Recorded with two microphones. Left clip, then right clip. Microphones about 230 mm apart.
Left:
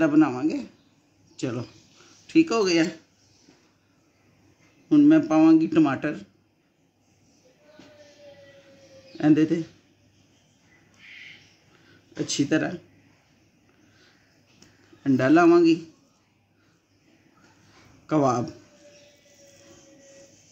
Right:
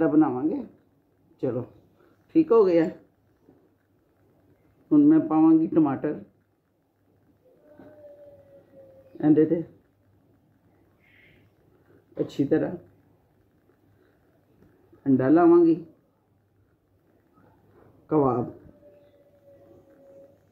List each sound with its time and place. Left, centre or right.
0.0 s speech: left
2.3 s speech: left
4.8 s speech: left
9.2 s speech: left
12.1 s speech: left
15.0 s speech: left
18.1 s speech: left